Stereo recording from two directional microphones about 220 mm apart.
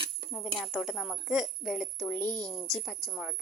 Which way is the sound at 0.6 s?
Centre (ahead or behind).